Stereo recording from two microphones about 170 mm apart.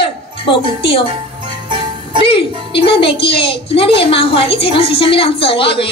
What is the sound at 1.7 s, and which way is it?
Music, 30° right (ahead or behind).